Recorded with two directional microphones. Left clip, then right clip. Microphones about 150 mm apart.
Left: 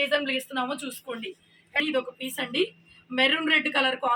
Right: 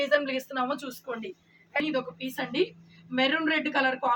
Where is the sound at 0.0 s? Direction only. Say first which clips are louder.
Even; 10° right (ahead or behind).